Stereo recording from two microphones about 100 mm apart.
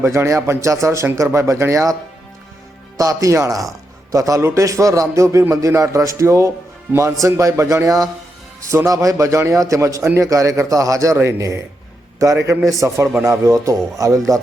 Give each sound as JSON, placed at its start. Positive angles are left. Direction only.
{"t": 0.0, "sound": "speech", "side_deg": -30}
{"t": 3.0, "sound": "a man's voice", "side_deg": -35}